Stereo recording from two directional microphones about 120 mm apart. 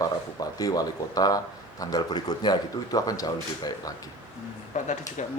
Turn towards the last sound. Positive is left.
turn(degrees=90)